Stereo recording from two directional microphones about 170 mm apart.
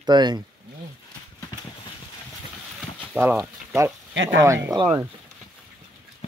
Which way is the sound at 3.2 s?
15° right (ahead or behind).